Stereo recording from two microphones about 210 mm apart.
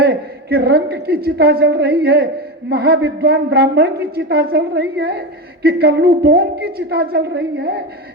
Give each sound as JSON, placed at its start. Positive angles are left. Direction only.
{"t": 0.0, "sound": "a woman's voice", "side_deg": -50}